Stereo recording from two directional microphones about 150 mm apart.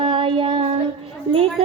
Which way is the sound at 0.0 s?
35° right (ahead or behind).